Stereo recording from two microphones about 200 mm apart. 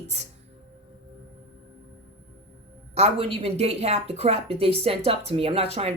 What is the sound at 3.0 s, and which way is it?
Speech, 25° right (ahead or behind).